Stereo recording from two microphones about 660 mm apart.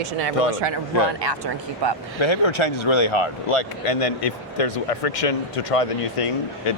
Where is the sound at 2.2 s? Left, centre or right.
Left.